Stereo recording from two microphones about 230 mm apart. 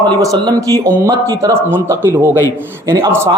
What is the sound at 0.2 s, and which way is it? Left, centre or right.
A man's voice, centre.